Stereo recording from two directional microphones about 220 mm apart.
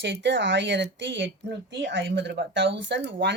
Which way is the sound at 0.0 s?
55° right (ahead or behind).